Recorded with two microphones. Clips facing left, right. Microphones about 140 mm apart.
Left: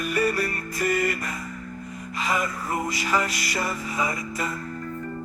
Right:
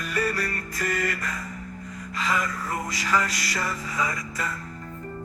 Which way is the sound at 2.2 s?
15° left (ahead or behind).